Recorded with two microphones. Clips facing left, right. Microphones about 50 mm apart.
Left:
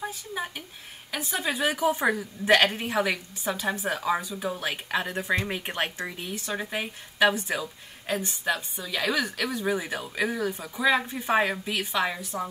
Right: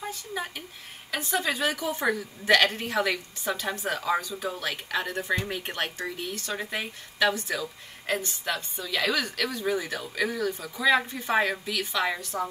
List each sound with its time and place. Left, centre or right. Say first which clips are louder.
0.0 s a woman's voice: left 1 dB; centre
11.6 s speech: left 1 dB; left
12.0 s a woman's voice: right 1 dB; centre